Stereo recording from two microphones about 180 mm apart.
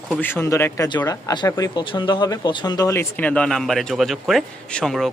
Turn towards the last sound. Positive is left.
turn(degrees=0)  # may be behind; listen again after turning